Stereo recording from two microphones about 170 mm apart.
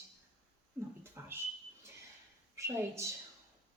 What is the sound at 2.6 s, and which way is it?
Speech, 15° right (ahead or behind).